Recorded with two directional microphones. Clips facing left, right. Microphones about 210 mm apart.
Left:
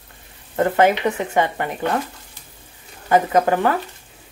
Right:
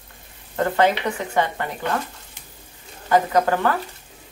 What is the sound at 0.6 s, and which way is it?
Speech, 20° left (ahead or behind).